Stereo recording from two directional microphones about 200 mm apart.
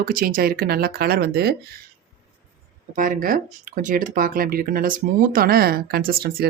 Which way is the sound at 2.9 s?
40° right (ahead or behind).